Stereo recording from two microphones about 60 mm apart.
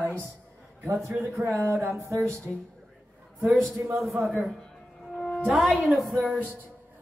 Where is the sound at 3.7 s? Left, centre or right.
Right.